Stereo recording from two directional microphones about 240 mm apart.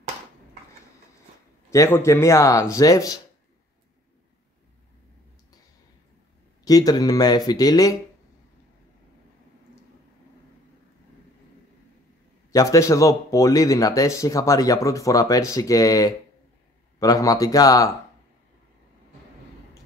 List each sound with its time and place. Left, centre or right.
1.7 s speech: centre
6.6 s speech: centre
12.4 s speech: centre